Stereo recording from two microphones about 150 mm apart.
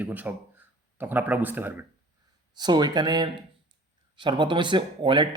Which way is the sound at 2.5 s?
30° right (ahead or behind).